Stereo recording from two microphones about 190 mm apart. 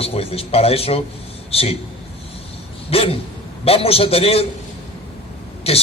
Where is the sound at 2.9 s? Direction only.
30° left (ahead or behind).